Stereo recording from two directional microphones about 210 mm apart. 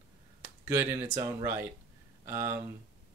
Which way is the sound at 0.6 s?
15° right (ahead or behind).